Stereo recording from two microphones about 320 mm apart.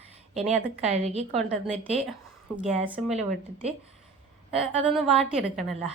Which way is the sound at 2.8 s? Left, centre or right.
Centre.